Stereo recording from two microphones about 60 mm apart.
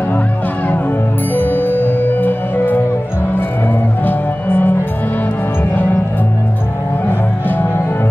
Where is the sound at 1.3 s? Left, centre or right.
Left.